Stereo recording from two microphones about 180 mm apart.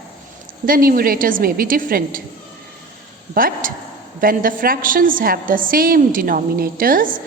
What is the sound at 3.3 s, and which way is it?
A woman's voice, 50° right (ahead or behind).